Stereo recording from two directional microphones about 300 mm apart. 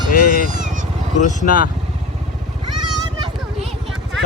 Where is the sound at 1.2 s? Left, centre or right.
Left.